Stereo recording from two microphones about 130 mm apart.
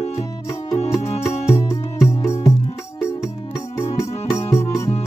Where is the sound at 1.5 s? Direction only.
20° left (ahead or behind).